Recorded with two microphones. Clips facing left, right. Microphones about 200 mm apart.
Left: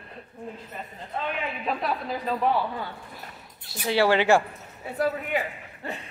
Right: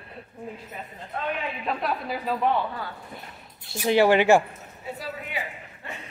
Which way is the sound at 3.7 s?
15° right (ahead or behind).